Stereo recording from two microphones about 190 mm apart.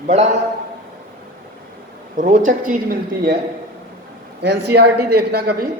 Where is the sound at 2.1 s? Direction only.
45° right (ahead or behind).